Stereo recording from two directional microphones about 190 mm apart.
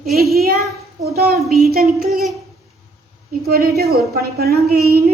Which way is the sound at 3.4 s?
55° right (ahead or behind).